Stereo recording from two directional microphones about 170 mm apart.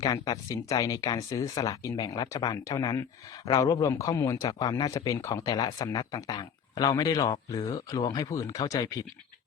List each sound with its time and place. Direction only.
0.0 s a man's voice: 20° left (ahead or behind)